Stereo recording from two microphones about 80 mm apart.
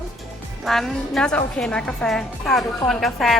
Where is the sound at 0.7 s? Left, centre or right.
Centre.